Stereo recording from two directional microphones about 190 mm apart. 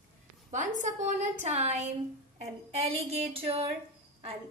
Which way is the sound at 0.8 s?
35° right (ahead or behind).